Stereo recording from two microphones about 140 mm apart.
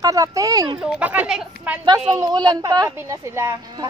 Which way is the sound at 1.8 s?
30° right (ahead or behind).